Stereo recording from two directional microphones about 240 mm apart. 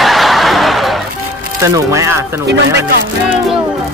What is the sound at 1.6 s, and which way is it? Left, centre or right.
Speech, centre.